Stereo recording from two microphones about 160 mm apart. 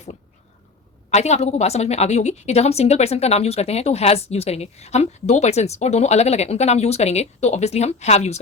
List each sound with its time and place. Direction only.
1.1 s a woman's voice: 45° left (ahead or behind)